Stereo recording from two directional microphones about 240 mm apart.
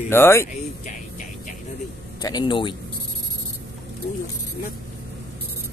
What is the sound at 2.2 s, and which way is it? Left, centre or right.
Speech, centre.